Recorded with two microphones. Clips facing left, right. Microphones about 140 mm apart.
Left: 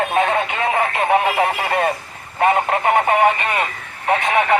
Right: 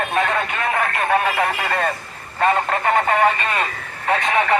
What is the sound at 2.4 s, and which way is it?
Speech, 20° left (ahead or behind).